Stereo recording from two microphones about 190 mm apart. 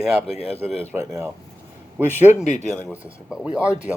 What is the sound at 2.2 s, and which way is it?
Speech, 40° left (ahead or behind).